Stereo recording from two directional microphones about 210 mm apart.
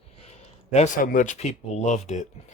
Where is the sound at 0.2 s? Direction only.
30° left (ahead or behind).